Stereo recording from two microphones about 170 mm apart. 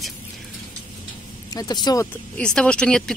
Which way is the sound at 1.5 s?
20° left (ahead or behind).